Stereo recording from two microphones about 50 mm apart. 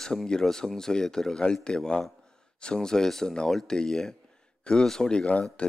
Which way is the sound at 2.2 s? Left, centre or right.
Centre.